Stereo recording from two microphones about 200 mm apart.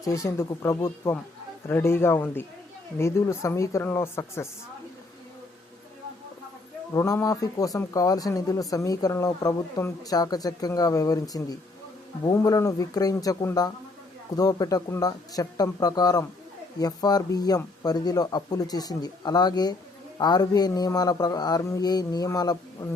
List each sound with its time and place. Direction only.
0.0 s a man's voice: 15° left (ahead or behind)
6.9 s a man's voice: 15° left (ahead or behind)